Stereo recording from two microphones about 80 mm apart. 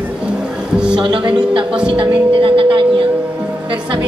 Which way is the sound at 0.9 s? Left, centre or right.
Right.